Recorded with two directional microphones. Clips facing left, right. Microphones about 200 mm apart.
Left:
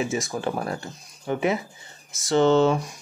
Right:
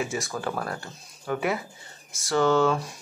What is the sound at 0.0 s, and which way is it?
Speech, 20° left (ahead or behind).